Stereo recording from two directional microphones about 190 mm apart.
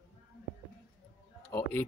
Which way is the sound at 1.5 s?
10° left (ahead or behind).